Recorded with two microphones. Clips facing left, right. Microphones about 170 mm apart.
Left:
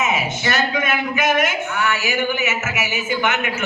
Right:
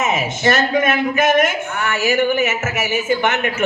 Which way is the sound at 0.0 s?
50° right (ahead or behind).